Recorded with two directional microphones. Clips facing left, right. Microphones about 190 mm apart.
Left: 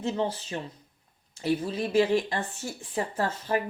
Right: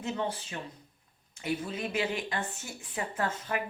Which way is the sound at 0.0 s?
30° left (ahead or behind).